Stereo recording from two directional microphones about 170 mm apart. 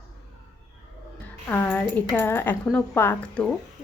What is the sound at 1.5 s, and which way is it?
A woman's voice, 10° left (ahead or behind).